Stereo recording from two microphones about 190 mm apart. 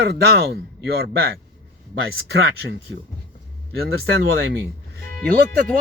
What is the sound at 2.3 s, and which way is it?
Speech, 80° right.